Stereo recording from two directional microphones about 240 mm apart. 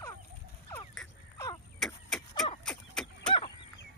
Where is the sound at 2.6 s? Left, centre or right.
Centre.